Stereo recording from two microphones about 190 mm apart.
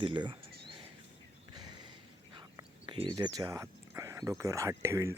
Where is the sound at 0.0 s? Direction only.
25° right (ahead or behind).